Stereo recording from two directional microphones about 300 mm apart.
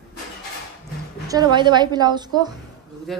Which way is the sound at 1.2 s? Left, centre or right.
Centre.